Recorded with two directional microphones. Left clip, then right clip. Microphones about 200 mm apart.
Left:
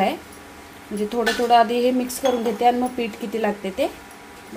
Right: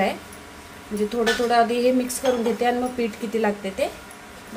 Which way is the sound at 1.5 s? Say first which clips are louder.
Left 5 dB; 30° left (ahead or behind).